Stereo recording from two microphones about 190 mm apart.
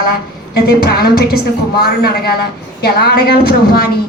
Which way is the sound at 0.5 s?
55° left (ahead or behind).